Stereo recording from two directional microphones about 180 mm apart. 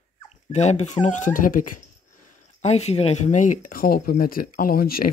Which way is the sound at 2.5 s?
35° left (ahead or behind).